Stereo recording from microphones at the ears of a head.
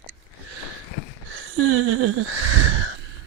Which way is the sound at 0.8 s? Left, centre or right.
Left.